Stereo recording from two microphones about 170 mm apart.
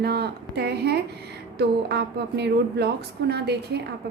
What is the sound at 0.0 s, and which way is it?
A woman's voice, 70° right (ahead or behind).